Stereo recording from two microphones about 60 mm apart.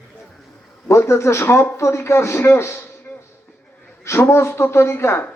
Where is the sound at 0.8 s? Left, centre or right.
Left.